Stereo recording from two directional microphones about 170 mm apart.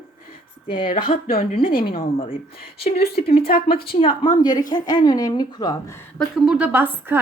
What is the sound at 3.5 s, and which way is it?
Speech, 60° left (ahead or behind).